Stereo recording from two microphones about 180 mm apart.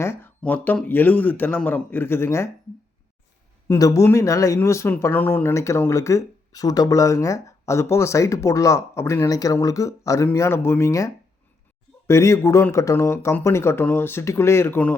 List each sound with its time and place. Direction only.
0.0 s speech: 15° left (ahead or behind)
3.7 s speech: 20° left (ahead or behind)